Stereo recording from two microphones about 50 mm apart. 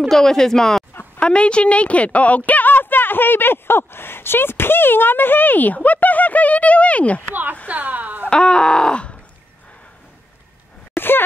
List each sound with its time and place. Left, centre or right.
0.1 s speech: centre
1.2 s a woman's voice: left
7.6 s a woman's voice: right
8.3 s speech: centre
11.0 s a sound: left